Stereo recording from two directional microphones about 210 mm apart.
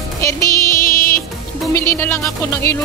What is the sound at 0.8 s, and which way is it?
Music, 45° left (ahead or behind).